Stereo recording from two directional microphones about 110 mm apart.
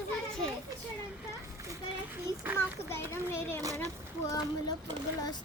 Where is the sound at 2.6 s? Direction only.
25° left (ahead or behind).